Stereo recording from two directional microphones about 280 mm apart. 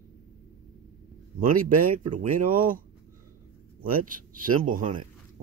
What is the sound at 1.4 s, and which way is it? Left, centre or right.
Speech, right.